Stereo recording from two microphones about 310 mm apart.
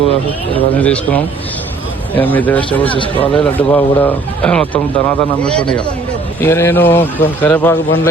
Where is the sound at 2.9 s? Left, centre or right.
Centre.